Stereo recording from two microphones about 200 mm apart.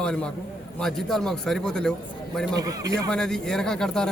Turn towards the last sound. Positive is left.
turn(degrees=5)  # may be behind; listen again after turning